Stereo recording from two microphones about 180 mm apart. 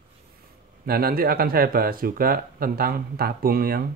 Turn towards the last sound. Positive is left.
turn(degrees=-55)  # may be behind; listen again after turning